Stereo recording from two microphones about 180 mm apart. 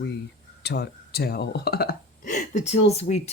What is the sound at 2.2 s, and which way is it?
Speech, 45° left (ahead or behind).